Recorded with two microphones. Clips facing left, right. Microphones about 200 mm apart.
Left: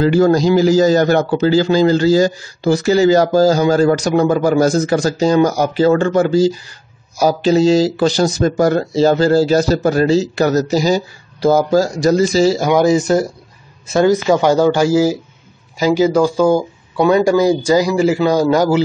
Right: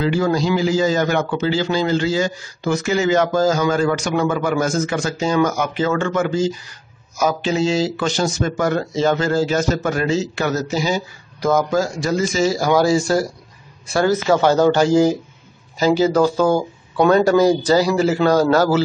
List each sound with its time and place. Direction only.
0.0 s a man's voice: 40° left (ahead or behind)
12.5 s a man's voice: 20° left (ahead or behind)